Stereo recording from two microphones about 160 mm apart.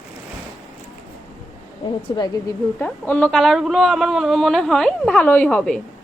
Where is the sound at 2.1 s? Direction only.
30° left (ahead or behind).